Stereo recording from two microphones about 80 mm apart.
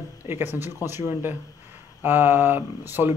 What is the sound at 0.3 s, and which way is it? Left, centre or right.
Speech, right.